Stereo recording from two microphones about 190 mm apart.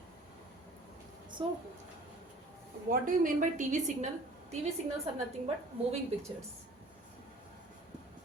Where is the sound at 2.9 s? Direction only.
45° right (ahead or behind).